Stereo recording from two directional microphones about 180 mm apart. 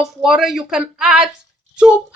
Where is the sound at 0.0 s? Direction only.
Centre (ahead or behind).